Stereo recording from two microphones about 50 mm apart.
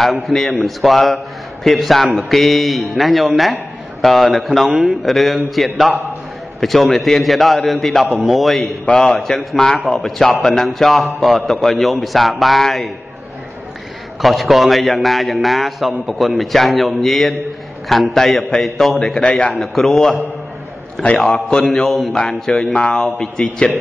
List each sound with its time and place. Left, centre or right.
0.0 s a man's voice: centre
6.6 s a man's voice: centre
14.2 s a man's voice: centre
18.9 s a man's voice: centre
19.5 s a man's voice: centre
22.7 s a man's voice: centre